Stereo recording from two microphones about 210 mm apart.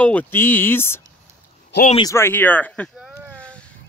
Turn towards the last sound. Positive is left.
turn(degrees=5)  # may be behind; listen again after turning